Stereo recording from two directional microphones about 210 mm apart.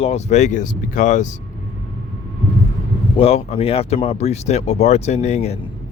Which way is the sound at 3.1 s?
30° left (ahead or behind).